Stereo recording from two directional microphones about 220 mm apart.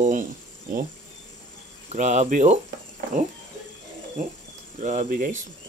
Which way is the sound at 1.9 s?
30° right (ahead or behind).